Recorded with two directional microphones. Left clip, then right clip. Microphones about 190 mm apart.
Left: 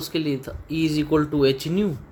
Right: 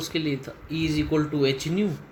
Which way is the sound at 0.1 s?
65° left (ahead or behind).